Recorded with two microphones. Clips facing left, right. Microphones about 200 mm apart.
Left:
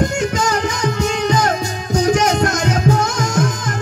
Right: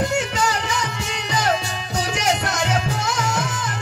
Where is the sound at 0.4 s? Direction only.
40° left (ahead or behind).